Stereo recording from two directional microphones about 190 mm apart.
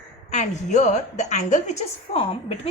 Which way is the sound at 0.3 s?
40° left (ahead or behind).